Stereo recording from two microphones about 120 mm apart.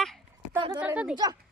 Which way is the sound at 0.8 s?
10° right (ahead or behind).